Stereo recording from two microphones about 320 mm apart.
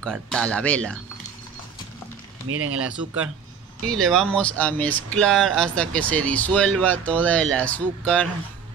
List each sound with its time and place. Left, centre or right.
0.0 s speech: centre
2.4 s speech: right
3.8 s speech: centre